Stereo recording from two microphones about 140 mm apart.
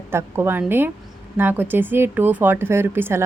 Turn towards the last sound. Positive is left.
turn(degrees=-15)  # may be behind; listen again after turning